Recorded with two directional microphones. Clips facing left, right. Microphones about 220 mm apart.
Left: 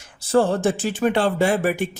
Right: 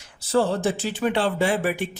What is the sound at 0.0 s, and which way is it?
Speech, 50° left (ahead or behind).